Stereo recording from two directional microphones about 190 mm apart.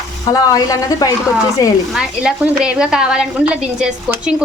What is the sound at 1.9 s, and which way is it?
A woman's voice, 5° right (ahead or behind).